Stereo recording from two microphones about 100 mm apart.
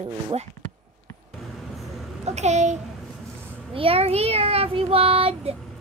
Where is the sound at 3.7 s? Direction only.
70° right (ahead or behind).